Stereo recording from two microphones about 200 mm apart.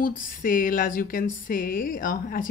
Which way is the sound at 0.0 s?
45° left (ahead or behind).